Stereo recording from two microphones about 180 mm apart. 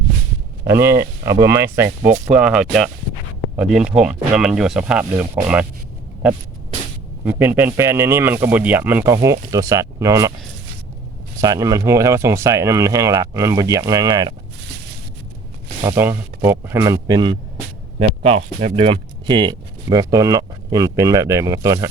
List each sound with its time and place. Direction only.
0.7 s speech: 15° right (ahead or behind)
7.3 s speech: 10° right (ahead or behind)
11.3 s speech: 20° right (ahead or behind)
15.8 s speech: 15° right (ahead or behind)
18.2 s speech: 35° right (ahead or behind); by 21.8 s 15° right (ahead or behind)